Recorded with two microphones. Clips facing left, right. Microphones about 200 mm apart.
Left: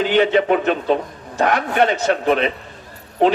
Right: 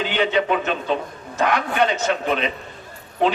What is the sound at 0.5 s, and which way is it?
A man's voice, 35° left (ahead or behind).